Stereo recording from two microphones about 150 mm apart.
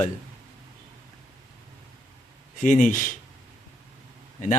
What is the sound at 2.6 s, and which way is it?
Speech, 60° left (ahead or behind).